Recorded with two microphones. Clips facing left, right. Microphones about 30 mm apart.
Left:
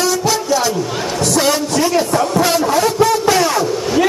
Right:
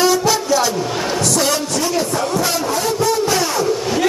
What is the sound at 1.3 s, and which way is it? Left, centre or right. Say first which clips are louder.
Speech: left 3 dB; centre.